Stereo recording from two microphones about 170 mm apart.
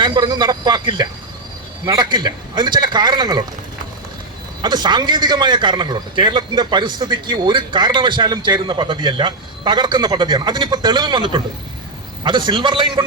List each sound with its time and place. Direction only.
0.0 s a man's voice: 25° right (ahead or behind)
4.6 s a man's voice: 25° right (ahead or behind)